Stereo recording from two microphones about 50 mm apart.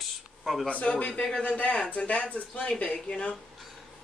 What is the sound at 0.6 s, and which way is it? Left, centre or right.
Speech, left.